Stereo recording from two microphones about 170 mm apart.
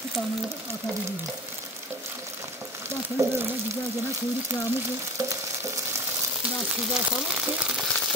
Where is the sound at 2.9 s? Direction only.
15° right (ahead or behind).